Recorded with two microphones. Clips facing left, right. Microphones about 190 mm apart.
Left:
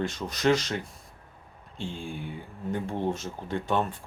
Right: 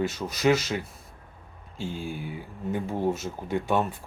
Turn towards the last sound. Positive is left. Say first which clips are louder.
# right 2 dB
turn(degrees=-10)  # may be behind; listen again after turning